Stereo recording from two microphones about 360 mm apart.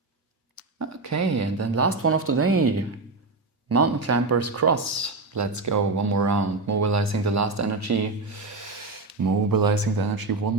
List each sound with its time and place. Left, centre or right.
0.5 s speech: right